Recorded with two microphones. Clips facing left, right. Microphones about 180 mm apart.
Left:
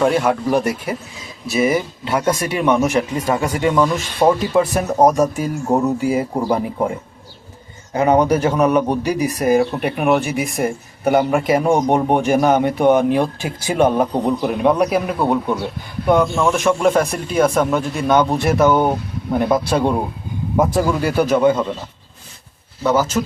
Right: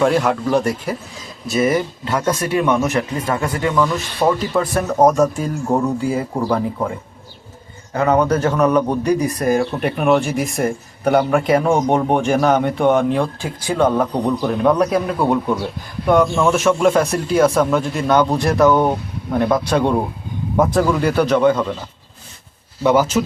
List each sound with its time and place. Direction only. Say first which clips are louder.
0.0 s speech: even; centre (ahead or behind); by 6.9 s 20° left (ahead or behind)
7.9 s speech: left 1 dB; 15° left (ahead or behind)
22.8 s speech: right 2 dB; 10° right (ahead or behind)